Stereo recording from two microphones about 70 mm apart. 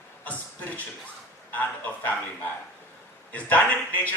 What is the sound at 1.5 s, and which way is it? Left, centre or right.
A man's voice, left.